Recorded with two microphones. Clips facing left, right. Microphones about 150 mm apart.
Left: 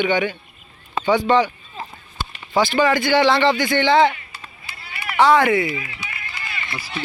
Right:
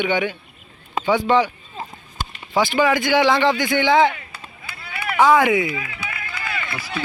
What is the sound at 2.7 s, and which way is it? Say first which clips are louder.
Speech: even; 5° right (ahead or behind).